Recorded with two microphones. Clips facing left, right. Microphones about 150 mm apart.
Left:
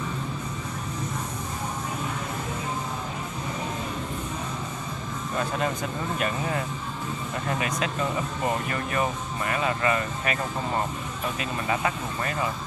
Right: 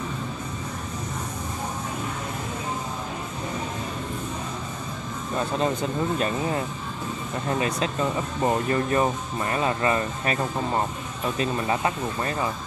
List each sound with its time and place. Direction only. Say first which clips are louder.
5.6 s speech: right 4 dB; 30° right (ahead or behind)